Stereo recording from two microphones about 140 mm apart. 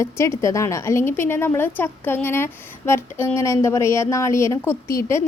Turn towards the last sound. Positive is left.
turn(degrees=20)  # may be behind; listen again after turning